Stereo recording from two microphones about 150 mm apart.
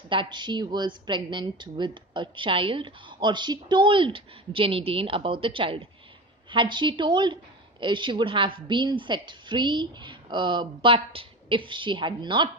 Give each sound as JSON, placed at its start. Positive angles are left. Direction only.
{"t": 0.1, "sound": "a woman's voice", "side_deg": -30}